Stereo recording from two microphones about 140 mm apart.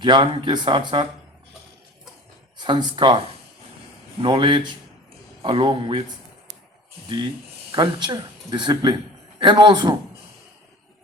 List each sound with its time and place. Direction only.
0.0 s speech: 35° right (ahead or behind)
2.6 s speech: 30° right (ahead or behind)
4.2 s speech: 35° right (ahead or behind)
7.7 s speech: 35° right (ahead or behind)